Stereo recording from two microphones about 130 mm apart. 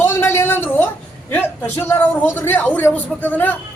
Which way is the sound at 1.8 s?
15° left (ahead or behind).